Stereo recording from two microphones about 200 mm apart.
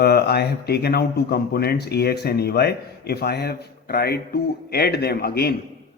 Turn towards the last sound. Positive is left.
turn(degrees=50)  # may be behind; listen again after turning